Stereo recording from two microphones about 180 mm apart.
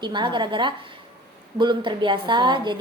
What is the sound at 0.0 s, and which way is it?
A woman's voice, 25° right (ahead or behind).